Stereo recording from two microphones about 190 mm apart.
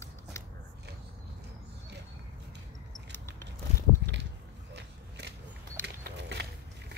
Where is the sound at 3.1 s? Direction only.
10° left (ahead or behind).